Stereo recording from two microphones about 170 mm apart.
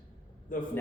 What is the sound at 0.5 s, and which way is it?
Speech, 50° left (ahead or behind).